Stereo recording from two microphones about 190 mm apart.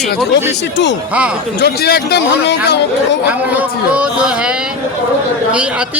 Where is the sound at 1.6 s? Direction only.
60° left (ahead or behind).